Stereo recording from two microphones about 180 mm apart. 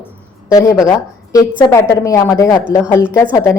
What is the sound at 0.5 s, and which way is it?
A woman's voice, 15° left (ahead or behind).